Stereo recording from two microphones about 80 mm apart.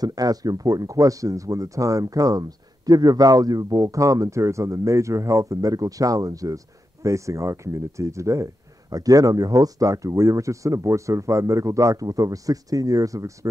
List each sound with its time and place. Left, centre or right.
0.0 s speech: right